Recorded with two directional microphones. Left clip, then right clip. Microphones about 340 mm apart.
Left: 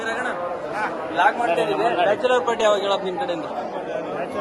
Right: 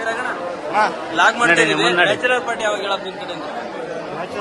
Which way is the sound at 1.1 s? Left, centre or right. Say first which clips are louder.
Right 3 dB; centre.